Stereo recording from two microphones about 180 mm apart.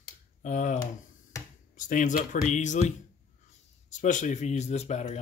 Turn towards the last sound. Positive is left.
turn(degrees=40)  # may be behind; listen again after turning